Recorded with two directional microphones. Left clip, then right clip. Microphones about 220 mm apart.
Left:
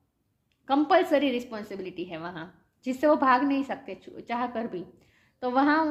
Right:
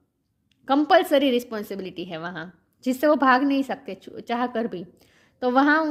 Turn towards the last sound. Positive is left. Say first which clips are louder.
# right 4 dB
turn(degrees=-50)  # may be behind; listen again after turning